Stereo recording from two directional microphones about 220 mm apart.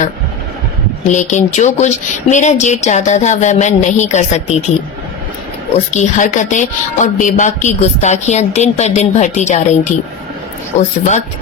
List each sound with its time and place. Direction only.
1.0 s a woman's voice: 35° left (ahead or behind)
5.7 s a woman's voice: 30° left (ahead or behind)